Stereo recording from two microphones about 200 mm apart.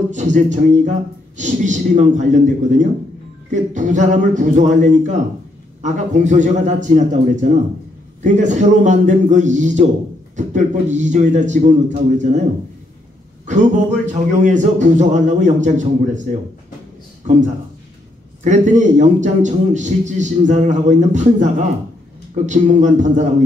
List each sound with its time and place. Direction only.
0.1 s a man's voice: 40° right (ahead or behind)
13.5 s a man's voice: 35° right (ahead or behind)
18.4 s a man's voice: 40° right (ahead or behind)